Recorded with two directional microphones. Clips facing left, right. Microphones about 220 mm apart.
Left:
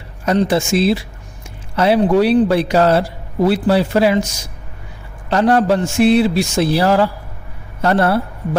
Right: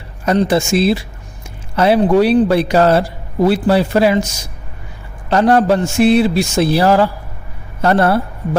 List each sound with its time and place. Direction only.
0.3 s a man's voice: 45° right (ahead or behind)
5.3 s a man's voice: 45° right (ahead or behind)